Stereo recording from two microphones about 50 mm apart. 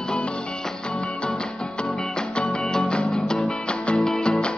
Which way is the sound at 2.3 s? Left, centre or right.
Centre.